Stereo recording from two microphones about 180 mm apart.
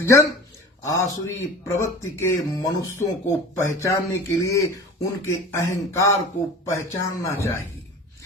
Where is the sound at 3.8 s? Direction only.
15° left (ahead or behind).